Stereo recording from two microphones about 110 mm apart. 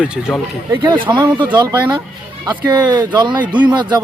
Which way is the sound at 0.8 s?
45° right (ahead or behind).